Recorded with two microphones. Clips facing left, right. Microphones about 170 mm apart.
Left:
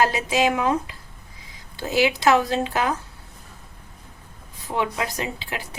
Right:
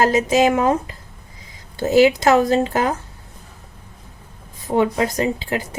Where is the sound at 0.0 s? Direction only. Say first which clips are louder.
Right 5 dB; 45° right (ahead or behind).